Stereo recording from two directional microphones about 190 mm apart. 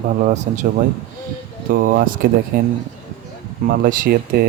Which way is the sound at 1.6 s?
50° right (ahead or behind).